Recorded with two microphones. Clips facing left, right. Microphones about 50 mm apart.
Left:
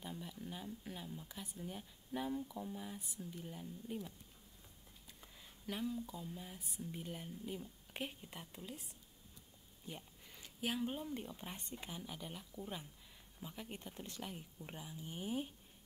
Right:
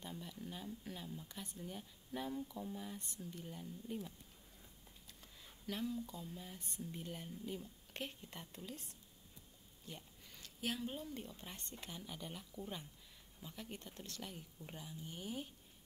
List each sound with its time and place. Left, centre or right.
0.0 s speech: centre
9.8 s speech: centre